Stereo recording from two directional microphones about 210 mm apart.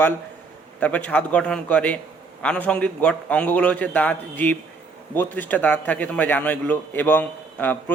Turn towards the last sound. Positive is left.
turn(degrees=10)  # may be behind; listen again after turning